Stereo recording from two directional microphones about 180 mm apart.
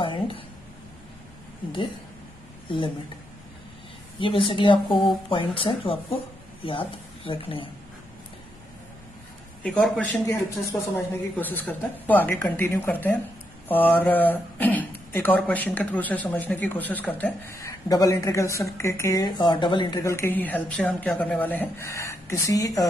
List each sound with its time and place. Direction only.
0.0 s a sound: 25° left (ahead or behind)
2.7 s speech: 30° left (ahead or behind)
4.2 s speech: 30° left (ahead or behind)
9.6 s a man's voice: centre (ahead or behind)
10.2 s speech: 15° left (ahead or behind)